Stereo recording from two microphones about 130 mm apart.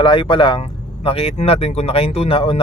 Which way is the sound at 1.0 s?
50° left (ahead or behind).